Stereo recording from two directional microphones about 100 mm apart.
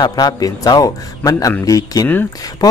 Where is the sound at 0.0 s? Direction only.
45° left (ahead or behind).